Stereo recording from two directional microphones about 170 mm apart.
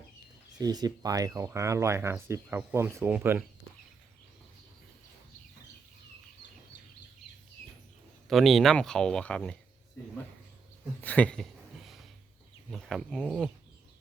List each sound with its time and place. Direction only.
0.6 s speech: 25° right (ahead or behind)
8.3 s speech: centre (ahead or behind)
11.0 s a sound: 10° left (ahead or behind)
12.7 s speech: 5° left (ahead or behind)